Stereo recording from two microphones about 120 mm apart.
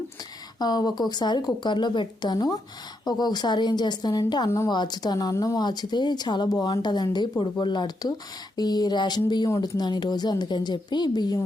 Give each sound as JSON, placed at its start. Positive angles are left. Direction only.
{"t": 0.6, "sound": "speech", "side_deg": 35}
{"t": 4.4, "sound": "a woman's voice", "side_deg": 25}
{"t": 4.7, "sound": "speech", "side_deg": 35}